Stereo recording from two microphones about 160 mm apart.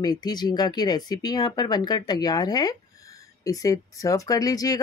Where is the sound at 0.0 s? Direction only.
25° left (ahead or behind).